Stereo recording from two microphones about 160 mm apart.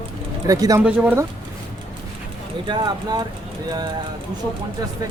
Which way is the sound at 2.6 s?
30° right (ahead or behind).